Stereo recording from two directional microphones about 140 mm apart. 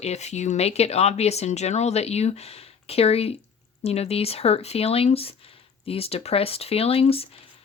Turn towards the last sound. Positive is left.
turn(degrees=45)  # may be behind; listen again after turning